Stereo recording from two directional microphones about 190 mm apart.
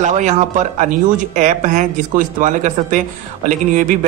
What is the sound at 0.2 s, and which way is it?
A man's voice, 40° right (ahead or behind).